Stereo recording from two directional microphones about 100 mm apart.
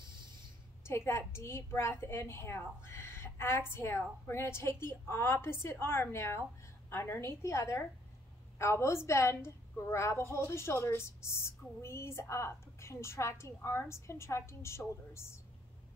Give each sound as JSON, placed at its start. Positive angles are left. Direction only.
{"t": 0.8, "sound": "a woman's voice", "side_deg": 25}